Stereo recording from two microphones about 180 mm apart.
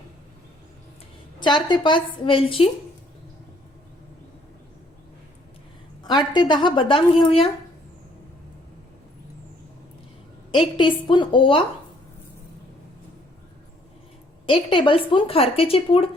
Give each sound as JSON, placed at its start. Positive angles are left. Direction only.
{"t": 1.4, "sound": "speech", "side_deg": 25}
{"t": 6.0, "sound": "speech", "side_deg": 25}
{"t": 10.5, "sound": "speech", "side_deg": 25}
{"t": 14.4, "sound": "speech", "side_deg": 25}